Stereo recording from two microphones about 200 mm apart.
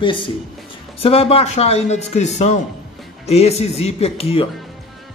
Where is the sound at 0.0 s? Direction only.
25° left (ahead or behind).